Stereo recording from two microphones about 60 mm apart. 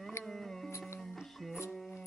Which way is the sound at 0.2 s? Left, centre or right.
Centre.